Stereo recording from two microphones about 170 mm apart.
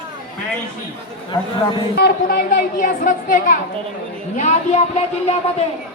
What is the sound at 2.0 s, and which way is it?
A woman's voice, 60° left (ahead or behind).